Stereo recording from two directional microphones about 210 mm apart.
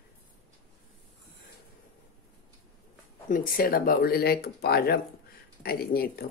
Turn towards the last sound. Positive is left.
turn(degrees=45)  # may be behind; listen again after turning